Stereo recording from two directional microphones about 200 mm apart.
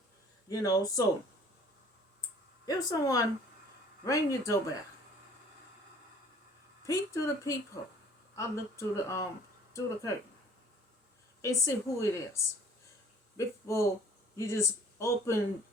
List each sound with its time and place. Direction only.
0.4 s speech: 15° left (ahead or behind)
2.6 s speech: 15° left (ahead or behind)
6.8 s speech: 15° left (ahead or behind)
11.4 s a man's voice: 15° left (ahead or behind)